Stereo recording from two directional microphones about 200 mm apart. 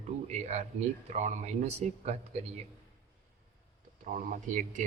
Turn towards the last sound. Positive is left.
turn(degrees=-40)  # may be behind; listen again after turning